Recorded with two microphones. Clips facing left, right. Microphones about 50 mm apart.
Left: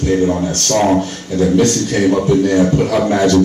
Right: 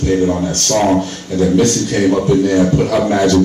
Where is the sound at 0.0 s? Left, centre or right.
Centre.